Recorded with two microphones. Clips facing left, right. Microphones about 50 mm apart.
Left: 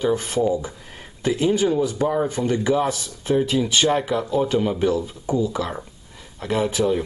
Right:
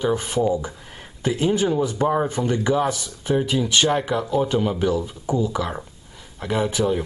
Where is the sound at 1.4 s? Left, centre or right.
Right.